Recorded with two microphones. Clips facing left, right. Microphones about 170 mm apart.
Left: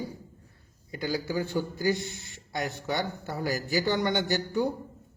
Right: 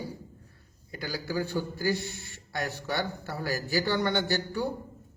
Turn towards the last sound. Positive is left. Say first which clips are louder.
# left 2 dB
turn(degrees=20)  # may be behind; listen again after turning